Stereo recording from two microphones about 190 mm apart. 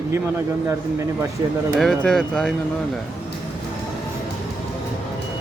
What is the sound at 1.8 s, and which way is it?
Speech, 5° left (ahead or behind).